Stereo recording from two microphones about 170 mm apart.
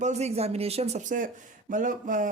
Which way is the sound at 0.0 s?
40° right (ahead or behind).